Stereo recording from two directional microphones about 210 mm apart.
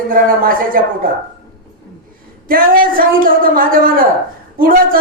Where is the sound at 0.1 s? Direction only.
40° right (ahead or behind).